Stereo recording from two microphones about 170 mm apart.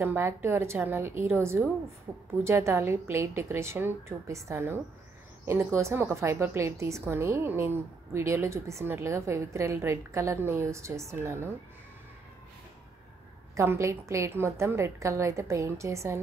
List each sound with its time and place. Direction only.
0.0 s a woman's voice: 15° right (ahead or behind)
13.6 s a woman's voice: 15° right (ahead or behind)